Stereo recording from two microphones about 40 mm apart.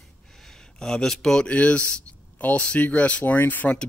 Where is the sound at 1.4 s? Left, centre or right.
Left.